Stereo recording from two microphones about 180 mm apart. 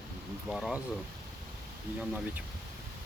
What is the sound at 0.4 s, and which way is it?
Speech, centre (ahead or behind).